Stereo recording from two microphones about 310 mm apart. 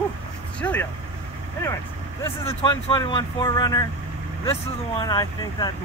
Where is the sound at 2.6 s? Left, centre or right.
Centre.